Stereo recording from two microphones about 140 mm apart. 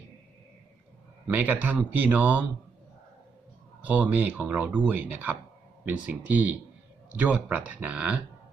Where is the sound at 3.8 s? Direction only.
10° right (ahead or behind).